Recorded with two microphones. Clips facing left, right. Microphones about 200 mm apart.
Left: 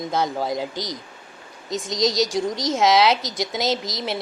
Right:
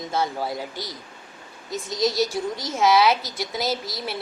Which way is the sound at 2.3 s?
90° left.